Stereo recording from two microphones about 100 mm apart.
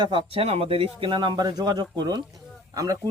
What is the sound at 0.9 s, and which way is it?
Speech, 55° right (ahead or behind).